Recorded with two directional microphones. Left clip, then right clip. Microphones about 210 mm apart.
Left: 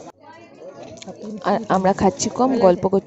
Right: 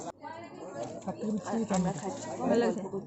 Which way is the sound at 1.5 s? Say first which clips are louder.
Left 17 dB; 45° left (ahead or behind).